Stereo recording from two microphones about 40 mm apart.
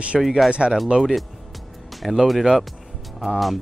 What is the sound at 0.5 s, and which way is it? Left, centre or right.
Speech, right.